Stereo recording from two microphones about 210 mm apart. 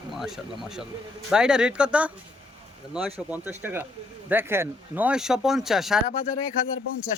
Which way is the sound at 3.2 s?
10° right (ahead or behind).